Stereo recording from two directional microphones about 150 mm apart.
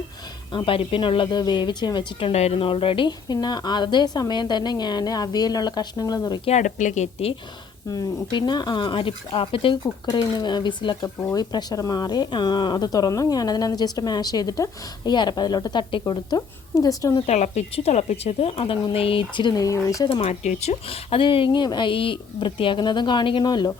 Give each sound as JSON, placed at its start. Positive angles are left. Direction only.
{"t": 0.5, "sound": "speech", "side_deg": 35}
{"t": 6.4, "sound": "speech", "side_deg": 50}
{"t": 7.9, "sound": "speech", "side_deg": 30}
{"t": 9.8, "sound": "speech", "side_deg": 25}
{"t": 17.2, "sound": "speech", "side_deg": 50}
{"t": 20.1, "sound": "speech", "side_deg": 45}